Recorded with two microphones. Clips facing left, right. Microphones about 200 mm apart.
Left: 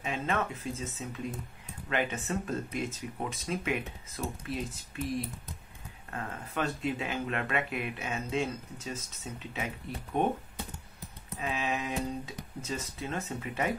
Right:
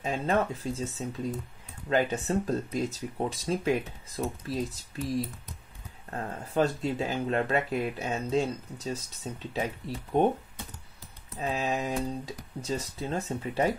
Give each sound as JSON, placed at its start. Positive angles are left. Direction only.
{"t": 0.0, "sound": "speech", "side_deg": -35}
{"t": 11.3, "sound": "speech", "side_deg": -35}